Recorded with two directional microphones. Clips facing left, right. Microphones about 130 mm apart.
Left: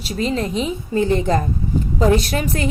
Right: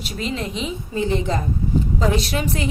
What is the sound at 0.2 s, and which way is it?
A woman's voice, 40° left (ahead or behind).